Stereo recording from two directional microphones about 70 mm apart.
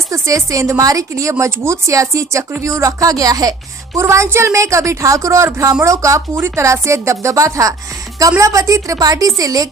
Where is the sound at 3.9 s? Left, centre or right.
Right.